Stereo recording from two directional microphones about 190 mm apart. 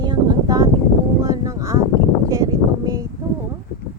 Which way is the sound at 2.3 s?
20° right (ahead or behind).